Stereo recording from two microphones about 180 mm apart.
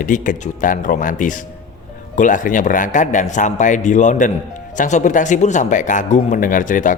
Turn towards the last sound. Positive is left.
turn(degrees=45)  # may be behind; listen again after turning